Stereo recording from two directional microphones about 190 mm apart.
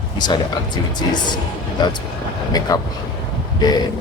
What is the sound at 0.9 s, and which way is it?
Speech, 20° left (ahead or behind).